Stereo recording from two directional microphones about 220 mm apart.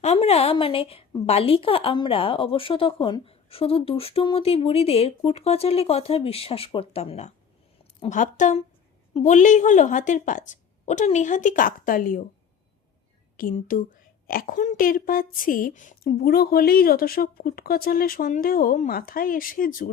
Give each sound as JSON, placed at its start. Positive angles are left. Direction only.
{"t": 0.0, "sound": "a woman's voice", "side_deg": 30}
{"t": 13.3, "sound": "a woman's voice", "side_deg": 40}